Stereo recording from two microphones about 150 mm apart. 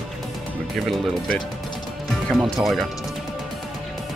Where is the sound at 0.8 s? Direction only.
Centre (ahead or behind).